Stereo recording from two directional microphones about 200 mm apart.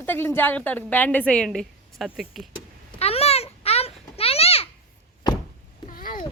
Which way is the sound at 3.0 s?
30° left (ahead or behind).